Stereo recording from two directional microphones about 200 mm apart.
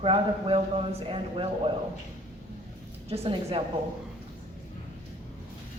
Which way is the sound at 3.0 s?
30° right (ahead or behind).